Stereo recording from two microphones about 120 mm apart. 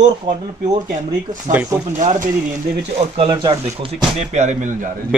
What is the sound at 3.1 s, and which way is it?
Speech, 50° right (ahead or behind).